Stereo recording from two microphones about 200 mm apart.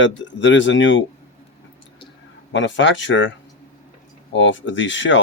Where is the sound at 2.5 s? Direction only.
65° left (ahead or behind).